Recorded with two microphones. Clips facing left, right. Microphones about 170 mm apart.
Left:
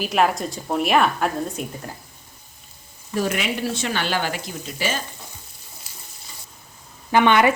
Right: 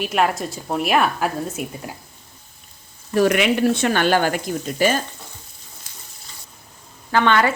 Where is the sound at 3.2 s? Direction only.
70° right (ahead or behind); by 4.9 s 50° right (ahead or behind).